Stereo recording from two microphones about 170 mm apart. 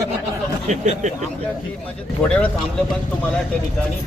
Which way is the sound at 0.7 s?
45° right (ahead or behind).